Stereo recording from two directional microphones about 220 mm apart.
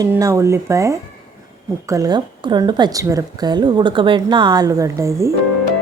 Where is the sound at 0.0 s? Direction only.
15° right (ahead or behind).